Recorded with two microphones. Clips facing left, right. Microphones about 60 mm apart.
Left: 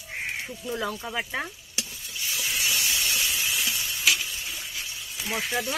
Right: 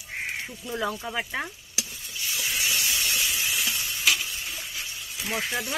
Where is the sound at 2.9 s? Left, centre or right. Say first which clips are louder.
Even; centre.